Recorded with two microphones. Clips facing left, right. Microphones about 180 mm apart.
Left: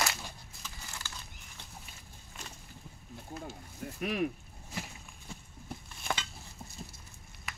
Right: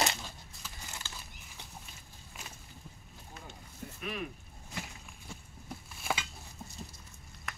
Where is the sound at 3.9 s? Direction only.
70° left (ahead or behind).